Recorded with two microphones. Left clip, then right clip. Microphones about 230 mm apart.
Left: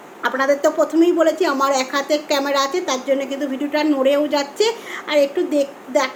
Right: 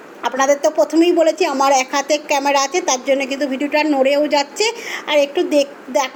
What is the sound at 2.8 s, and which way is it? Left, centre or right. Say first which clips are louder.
A woman's voice: right 3 dB; left.